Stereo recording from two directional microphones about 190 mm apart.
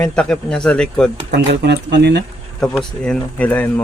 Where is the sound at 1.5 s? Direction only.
65° right (ahead or behind).